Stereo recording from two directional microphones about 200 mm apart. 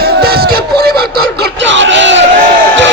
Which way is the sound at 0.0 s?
50° right (ahead or behind).